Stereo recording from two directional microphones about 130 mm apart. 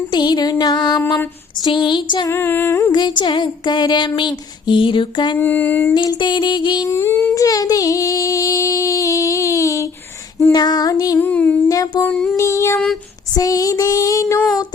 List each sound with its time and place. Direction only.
0.1 s a sound: 35° left (ahead or behind)
2.3 s music: 15° left (ahead or behind)
2.9 s a sound: 35° left (ahead or behind)
5.4 s music: 15° left (ahead or behind)
5.9 s a sound: 35° left (ahead or behind)
6.9 s music: 20° left (ahead or behind)
7.3 s female singing: 25° left (ahead or behind)
10.3 s music: 25° left (ahead or behind)
11.2 s music: 10° left (ahead or behind)
11.7 s music: 30° left (ahead or behind)
12.0 s music: 10° left (ahead or behind)
12.4 s music: 20° left (ahead or behind)